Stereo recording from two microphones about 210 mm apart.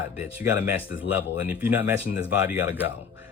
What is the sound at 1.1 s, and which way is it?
Speech, 10° right (ahead or behind).